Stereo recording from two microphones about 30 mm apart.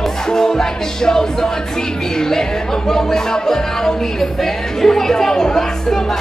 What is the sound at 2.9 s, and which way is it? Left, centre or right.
Speech, centre.